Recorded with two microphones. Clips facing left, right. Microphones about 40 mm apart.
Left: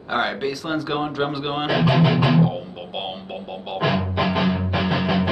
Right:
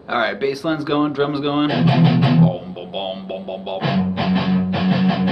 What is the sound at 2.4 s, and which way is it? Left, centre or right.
Music, centre.